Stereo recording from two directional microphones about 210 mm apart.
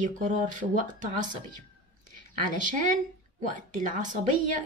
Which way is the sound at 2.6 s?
35° right (ahead or behind).